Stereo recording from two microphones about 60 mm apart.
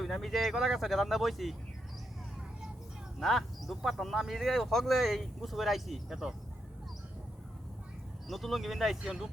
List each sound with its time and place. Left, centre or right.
0.0 s speech: centre
3.2 s speech: centre
8.3 s speech: centre